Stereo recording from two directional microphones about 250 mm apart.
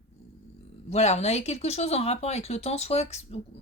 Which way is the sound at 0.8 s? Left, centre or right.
Left.